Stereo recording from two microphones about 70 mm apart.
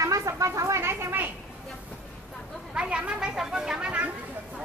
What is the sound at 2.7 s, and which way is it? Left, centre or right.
Speech, centre.